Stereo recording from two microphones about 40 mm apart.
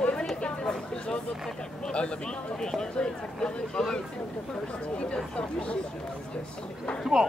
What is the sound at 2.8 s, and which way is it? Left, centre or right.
Speech, centre.